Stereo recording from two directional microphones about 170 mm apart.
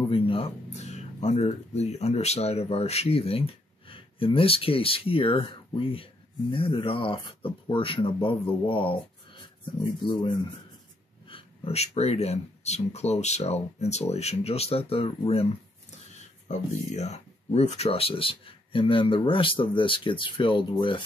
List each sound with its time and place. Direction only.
0.0 s speech: 30° left (ahead or behind)
11.2 s speech: 35° left (ahead or behind)
16.4 s speech: 45° left (ahead or behind)